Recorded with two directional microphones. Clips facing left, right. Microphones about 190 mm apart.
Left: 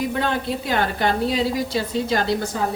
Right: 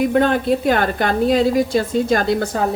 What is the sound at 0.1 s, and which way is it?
A woman's voice, 55° right (ahead or behind).